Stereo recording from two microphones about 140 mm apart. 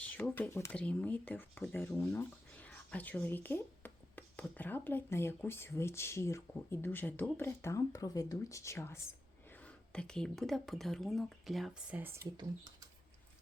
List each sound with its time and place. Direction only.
0.0 s speech: 10° left (ahead or behind)
11.9 s speech: 15° right (ahead or behind)